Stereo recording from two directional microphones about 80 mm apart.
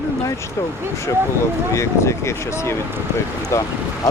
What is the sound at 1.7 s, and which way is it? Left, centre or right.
Speech, left.